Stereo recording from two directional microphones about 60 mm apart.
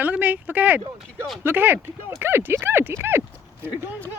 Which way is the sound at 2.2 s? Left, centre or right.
Right.